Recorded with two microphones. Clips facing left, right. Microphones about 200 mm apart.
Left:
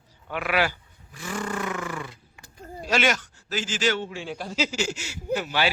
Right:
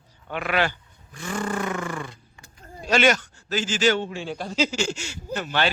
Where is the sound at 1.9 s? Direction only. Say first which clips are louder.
Right 2 dB; 5° left (ahead or behind).